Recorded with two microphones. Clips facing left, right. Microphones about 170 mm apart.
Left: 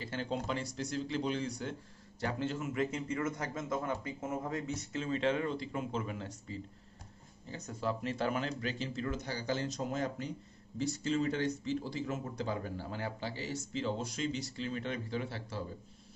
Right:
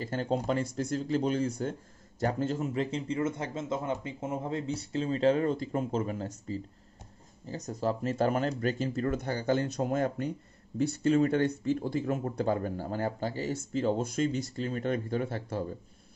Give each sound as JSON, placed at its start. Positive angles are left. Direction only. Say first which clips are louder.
{"t": 0.0, "sound": "speech", "louder": "right 6 dB", "side_deg": -45}